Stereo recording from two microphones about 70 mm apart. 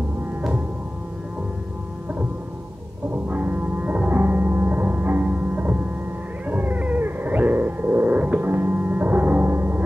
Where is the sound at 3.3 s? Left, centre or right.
Right.